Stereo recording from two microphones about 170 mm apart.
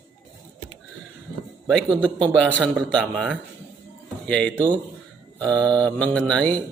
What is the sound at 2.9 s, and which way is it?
Speech, 5° left (ahead or behind).